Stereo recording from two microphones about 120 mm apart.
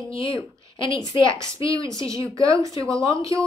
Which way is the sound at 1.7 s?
30° right (ahead or behind).